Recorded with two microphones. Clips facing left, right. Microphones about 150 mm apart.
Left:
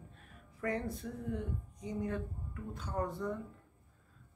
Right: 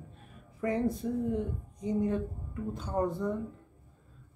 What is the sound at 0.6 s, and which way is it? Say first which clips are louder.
Speech: right 7 dB; 20° right (ahead or behind).